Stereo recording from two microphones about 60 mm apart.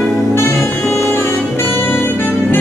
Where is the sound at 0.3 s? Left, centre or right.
Left.